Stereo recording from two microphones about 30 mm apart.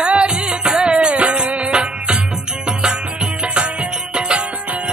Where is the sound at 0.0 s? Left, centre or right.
Right.